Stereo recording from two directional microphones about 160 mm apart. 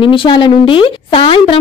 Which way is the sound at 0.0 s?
30° left (ahead or behind).